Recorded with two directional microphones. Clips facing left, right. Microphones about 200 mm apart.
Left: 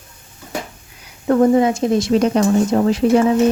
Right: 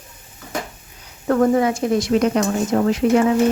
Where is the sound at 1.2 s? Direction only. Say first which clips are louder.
Left 3 dB; 20° left (ahead or behind).